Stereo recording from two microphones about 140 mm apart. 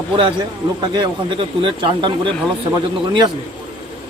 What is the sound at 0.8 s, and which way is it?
A man's voice, 30° right (ahead or behind).